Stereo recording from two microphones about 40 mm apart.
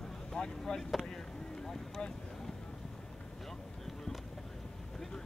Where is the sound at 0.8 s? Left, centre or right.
Centre.